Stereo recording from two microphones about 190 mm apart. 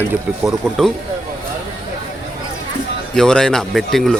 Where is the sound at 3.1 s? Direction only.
5° left (ahead or behind).